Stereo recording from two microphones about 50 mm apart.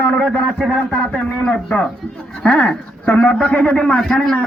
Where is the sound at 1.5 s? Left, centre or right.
Centre.